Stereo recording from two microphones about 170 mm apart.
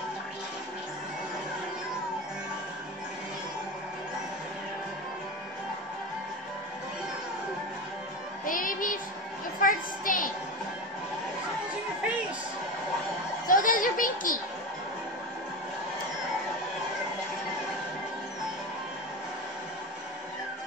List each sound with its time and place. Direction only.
8.5 s child singing: 55° left (ahead or behind)
9.6 s a sound: 50° left (ahead or behind)
13.5 s children playing: 55° left (ahead or behind)